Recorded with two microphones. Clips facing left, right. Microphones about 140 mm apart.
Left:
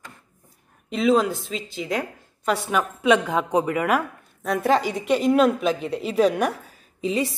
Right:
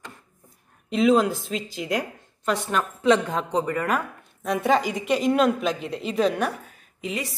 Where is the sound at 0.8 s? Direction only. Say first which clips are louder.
Right 1 dB; centre (ahead or behind).